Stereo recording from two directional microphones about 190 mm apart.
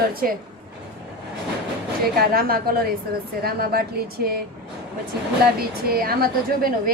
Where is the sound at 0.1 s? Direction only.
50° right (ahead or behind).